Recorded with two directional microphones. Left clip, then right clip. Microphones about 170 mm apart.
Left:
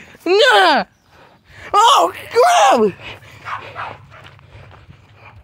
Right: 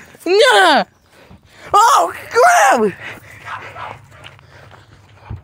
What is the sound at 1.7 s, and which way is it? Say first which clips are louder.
Speech: right 1 dB; 20° right (ahead or behind).